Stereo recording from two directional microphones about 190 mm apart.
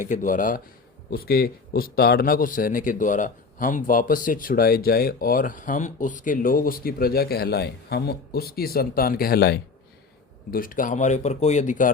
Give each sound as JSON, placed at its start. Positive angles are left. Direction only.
{"t": 0.1, "sound": "a man's voice", "side_deg": 40}